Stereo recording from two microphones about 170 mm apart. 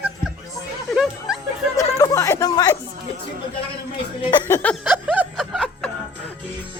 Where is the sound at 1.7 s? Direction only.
20° left (ahead or behind).